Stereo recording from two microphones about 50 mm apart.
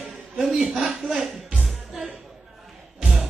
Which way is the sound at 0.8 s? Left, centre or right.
Centre.